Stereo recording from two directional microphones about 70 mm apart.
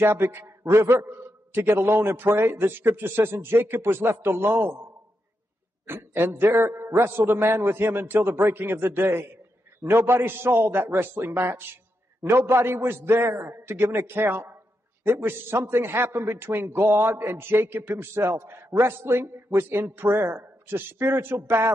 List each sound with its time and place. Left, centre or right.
0.0 s a man's voice: right
5.9 s a man's voice: right